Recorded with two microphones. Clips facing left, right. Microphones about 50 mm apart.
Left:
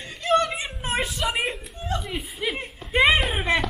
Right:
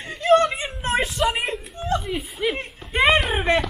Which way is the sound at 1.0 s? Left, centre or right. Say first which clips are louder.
Right 4 dB; centre.